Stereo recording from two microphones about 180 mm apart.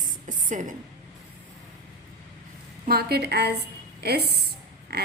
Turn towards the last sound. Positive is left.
turn(degrees=-60)  # may be behind; listen again after turning